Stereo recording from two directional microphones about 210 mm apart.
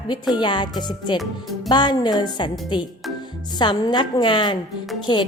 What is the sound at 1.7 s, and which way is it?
Speech, 20° left (ahead or behind).